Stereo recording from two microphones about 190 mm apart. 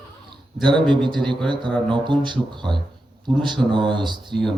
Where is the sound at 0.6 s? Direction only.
25° right (ahead or behind).